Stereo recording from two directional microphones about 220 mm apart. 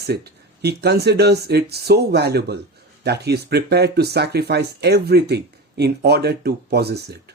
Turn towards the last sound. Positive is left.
turn(degrees=-45)  # may be behind; listen again after turning